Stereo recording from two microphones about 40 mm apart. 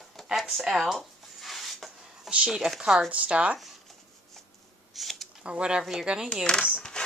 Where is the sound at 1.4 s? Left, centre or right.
Centre.